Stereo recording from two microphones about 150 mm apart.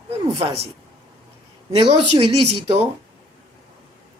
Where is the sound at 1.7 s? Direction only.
45° right (ahead or behind).